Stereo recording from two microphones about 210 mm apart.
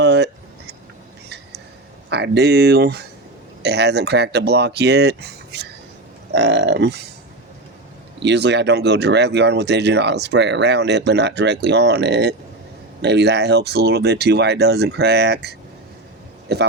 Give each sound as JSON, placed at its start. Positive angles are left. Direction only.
{"t": 0.0, "sound": "a sound", "side_deg": -55}
{"t": 2.0, "sound": "speech", "side_deg": -55}
{"t": 8.2, "sound": "speech", "side_deg": -55}